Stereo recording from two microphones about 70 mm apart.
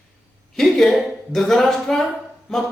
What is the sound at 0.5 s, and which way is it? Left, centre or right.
A man's voice, centre.